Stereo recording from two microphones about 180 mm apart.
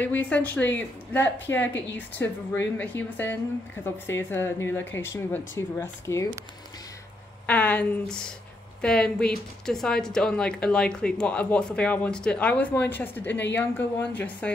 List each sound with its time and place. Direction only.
0.0 s a woman's voice: 10° left (ahead or behind)
7.4 s a woman's voice: 10° left (ahead or behind)
13.3 s a woman's voice: 75° left (ahead or behind)
13.6 s a woman's voice: 10° left (ahead or behind)